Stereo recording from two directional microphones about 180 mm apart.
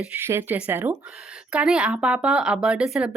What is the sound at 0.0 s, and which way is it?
Speech, 10° right (ahead or behind).